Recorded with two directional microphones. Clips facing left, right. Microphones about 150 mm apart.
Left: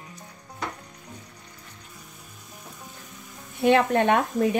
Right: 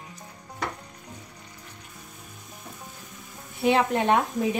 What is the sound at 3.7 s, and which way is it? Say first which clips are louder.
Speech: left 3 dB; 60° left (ahead or behind).